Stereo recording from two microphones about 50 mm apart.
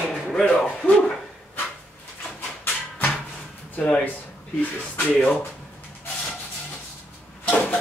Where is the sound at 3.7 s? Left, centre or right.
Left.